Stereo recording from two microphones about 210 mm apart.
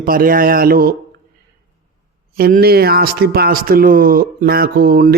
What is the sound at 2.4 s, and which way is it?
Speech, 45° right (ahead or behind).